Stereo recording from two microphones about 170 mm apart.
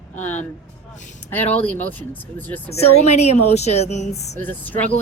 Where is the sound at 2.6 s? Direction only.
35° left (ahead or behind).